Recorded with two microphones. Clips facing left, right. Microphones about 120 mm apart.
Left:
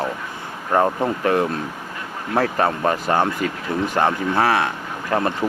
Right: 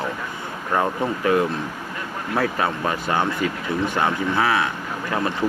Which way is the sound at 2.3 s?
40° left (ahead or behind).